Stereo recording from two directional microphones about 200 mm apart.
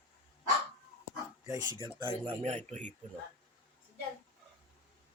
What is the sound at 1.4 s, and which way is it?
A woman's voice, 15° right (ahead or behind).